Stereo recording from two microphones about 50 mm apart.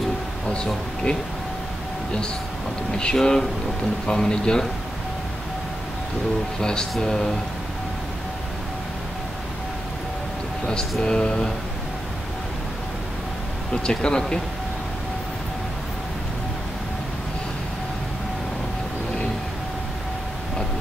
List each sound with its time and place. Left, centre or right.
0.5 s speech: centre
2.9 s speech: centre
6.6 s speech: centre
11.0 s speech: centre
13.8 s speech: centre